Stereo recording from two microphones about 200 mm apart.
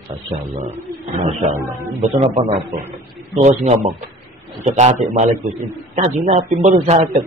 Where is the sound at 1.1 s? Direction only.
35° right (ahead or behind).